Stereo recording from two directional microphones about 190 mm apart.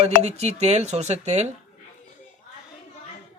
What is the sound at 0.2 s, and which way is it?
Speech, 35° right (ahead or behind).